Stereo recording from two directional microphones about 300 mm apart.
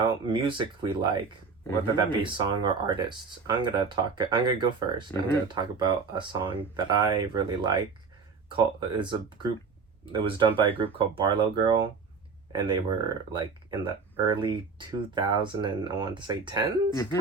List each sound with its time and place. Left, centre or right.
0.0 s speech: centre
16.9 s speech: centre